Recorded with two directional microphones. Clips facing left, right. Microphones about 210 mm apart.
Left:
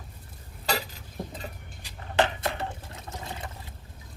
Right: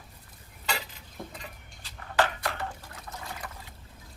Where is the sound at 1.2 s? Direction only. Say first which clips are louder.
Left 4 dB; 20° left (ahead or behind).